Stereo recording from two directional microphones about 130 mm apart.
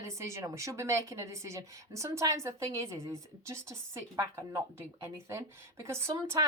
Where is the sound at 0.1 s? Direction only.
20° right (ahead or behind).